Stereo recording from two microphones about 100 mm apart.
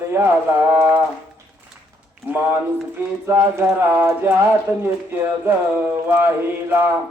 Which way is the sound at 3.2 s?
30° right (ahead or behind).